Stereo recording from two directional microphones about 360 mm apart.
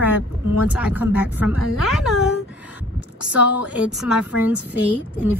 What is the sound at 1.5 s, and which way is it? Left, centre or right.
Speech, left.